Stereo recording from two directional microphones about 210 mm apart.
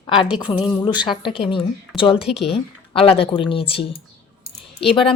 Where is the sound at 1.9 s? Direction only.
Centre (ahead or behind).